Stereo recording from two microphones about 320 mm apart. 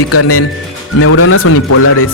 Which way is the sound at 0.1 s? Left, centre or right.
Left.